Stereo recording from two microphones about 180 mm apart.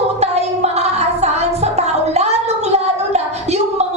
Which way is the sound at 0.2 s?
35° right (ahead or behind).